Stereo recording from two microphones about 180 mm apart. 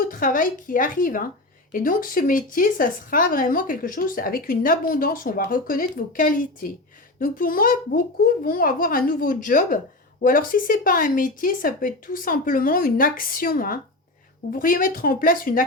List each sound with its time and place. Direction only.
0.0 s a child's voice: 50° left (ahead or behind)